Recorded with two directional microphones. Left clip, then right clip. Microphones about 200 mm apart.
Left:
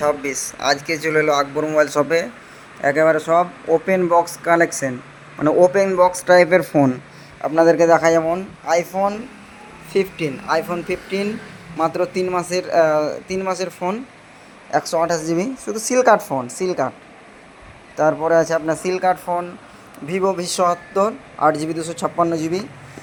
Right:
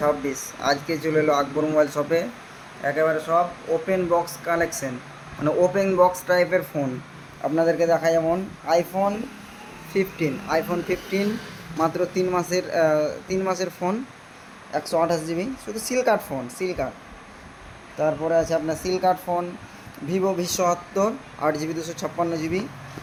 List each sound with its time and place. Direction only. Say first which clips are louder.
0.0 s speech: left 3 dB; 45° left (ahead or behind)
7.4 s speech: left 7 dB; 30° left (ahead or behind)
17.9 s speech: left 6 dB; 25° left (ahead or behind)